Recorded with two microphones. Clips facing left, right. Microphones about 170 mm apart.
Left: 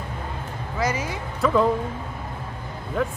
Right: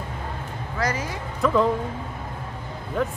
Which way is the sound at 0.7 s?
10° left (ahead or behind).